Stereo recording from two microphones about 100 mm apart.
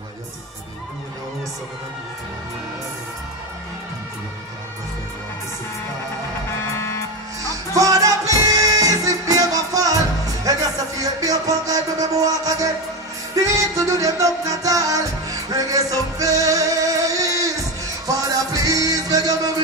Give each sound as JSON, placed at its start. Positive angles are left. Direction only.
{"t": 6.7, "sound": "music", "side_deg": 30}
{"t": 7.7, "sound": "music", "side_deg": -35}